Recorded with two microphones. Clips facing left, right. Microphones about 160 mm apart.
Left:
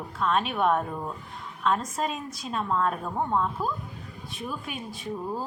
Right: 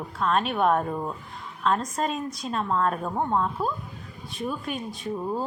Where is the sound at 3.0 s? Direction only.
15° right (ahead or behind).